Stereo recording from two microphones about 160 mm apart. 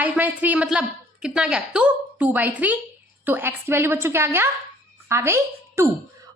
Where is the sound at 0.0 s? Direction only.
10° right (ahead or behind).